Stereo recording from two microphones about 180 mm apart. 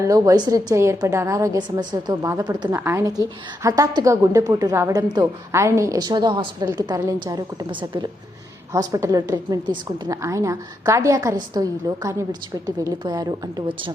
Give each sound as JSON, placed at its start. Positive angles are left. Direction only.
{"t": 0.0, "sound": "a woman's voice", "side_deg": -20}